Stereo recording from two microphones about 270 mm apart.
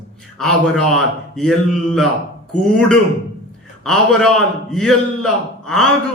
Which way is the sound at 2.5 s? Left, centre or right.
Left.